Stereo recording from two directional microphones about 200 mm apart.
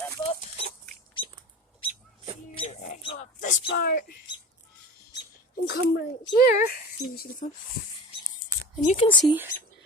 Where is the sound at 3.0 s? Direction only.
35° left (ahead or behind).